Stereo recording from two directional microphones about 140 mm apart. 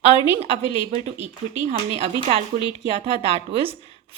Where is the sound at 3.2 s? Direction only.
45° right (ahead or behind).